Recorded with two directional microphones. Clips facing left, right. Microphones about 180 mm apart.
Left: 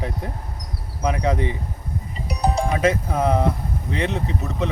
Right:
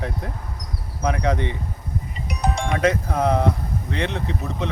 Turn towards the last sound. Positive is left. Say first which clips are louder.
# left 2 dB
turn(degrees=5)  # may be behind; listen again after turning